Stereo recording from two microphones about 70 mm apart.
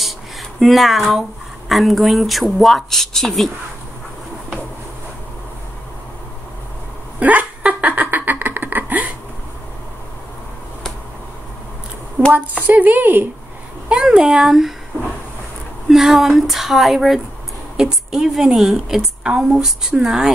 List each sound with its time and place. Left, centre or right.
0.6 s speech: centre
7.2 s a sound: right
12.2 s a sound: right
12.6 s speech: right
13.8 s speech: centre
15.9 s a woman's voice: centre